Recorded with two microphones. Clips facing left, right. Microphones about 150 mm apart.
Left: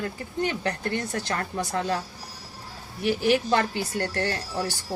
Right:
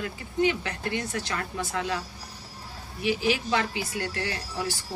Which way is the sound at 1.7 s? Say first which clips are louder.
Left 3 dB; 45° left (ahead or behind).